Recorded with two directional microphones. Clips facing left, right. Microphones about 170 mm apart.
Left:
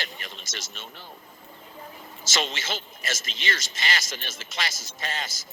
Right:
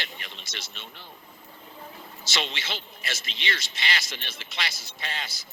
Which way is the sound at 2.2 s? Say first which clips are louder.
Left 3 dB; 45° left (ahead or behind).